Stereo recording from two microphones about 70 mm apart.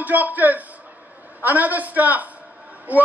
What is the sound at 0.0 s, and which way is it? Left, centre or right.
A man's voice, right.